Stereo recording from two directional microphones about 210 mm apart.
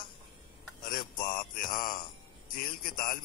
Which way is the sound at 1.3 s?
40° left (ahead or behind).